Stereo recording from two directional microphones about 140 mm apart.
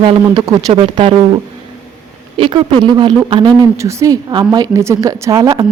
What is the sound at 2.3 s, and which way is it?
A woman's voice, 35° right (ahead or behind).